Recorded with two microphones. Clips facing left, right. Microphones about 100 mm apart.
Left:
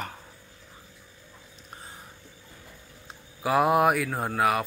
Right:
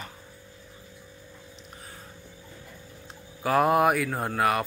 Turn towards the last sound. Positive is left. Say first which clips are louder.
# even
turn(degrees=0)  # may be behind; listen again after turning